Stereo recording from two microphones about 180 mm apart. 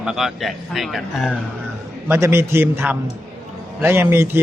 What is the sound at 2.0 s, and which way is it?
A man's voice, 15° right (ahead or behind).